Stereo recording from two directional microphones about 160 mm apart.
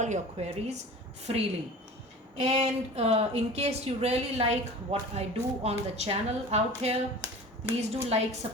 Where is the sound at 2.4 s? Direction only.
40° right (ahead or behind).